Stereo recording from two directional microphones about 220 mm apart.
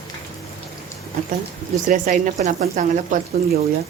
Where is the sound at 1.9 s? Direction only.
35° right (ahead or behind).